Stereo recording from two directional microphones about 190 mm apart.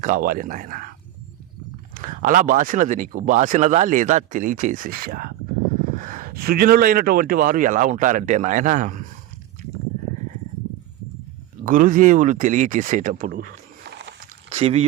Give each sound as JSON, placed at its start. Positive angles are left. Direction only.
{"t": 0.0, "sound": "speech", "side_deg": -45}
{"t": 2.0, "sound": "speech", "side_deg": -45}
{"t": 11.6, "sound": "speech", "side_deg": -45}
{"t": 14.5, "sound": "speech", "side_deg": -35}